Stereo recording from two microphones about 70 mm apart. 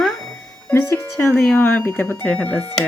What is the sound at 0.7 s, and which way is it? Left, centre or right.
Speech, left.